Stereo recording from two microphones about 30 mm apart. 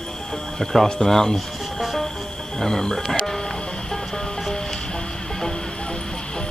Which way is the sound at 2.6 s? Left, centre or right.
Centre.